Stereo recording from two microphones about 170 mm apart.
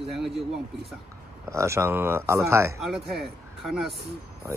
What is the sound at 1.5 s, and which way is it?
Speech, 15° right (ahead or behind).